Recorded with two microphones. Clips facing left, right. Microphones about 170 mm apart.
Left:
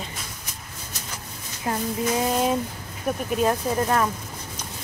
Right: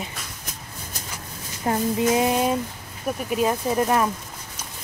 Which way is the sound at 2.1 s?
5° right (ahead or behind).